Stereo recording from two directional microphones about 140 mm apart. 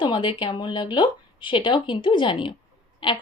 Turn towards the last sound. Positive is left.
turn(degrees=35)  # may be behind; listen again after turning